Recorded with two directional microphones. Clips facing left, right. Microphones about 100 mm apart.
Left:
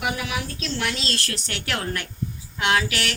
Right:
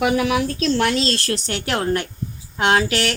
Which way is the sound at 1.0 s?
30° right (ahead or behind).